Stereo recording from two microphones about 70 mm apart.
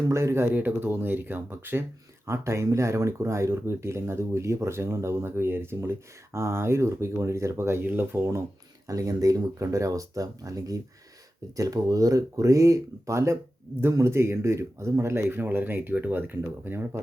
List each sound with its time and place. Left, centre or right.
0.1 s speech: right
0.4 s speech: right
2.2 s speech: right
8.9 s speech: right